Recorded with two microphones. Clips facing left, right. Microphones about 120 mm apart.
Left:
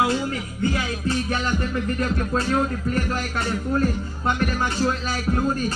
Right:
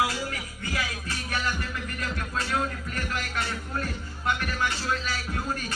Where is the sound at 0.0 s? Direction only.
25° left (ahead or behind).